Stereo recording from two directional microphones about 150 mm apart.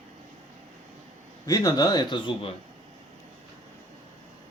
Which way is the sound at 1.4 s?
25° left (ahead or behind).